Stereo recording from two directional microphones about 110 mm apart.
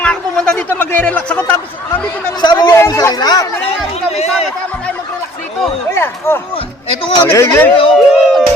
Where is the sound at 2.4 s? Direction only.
40° left (ahead or behind).